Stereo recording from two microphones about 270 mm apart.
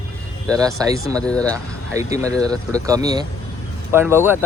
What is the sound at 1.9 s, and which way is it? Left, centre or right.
Speech, centre.